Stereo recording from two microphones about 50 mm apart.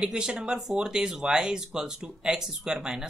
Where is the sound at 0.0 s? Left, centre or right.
Centre.